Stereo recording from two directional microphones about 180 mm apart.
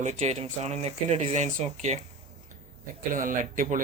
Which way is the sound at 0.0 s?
40° right (ahead or behind).